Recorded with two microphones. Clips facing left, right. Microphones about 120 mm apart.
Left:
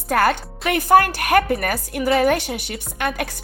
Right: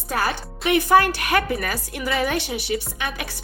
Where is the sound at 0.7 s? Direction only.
45° left (ahead or behind).